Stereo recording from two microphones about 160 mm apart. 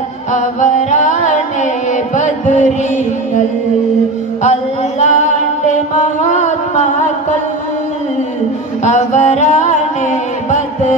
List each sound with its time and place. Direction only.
0.3 s music: 50° left (ahead or behind)
4.4 s music: 45° left (ahead or behind)
8.8 s music: 45° left (ahead or behind)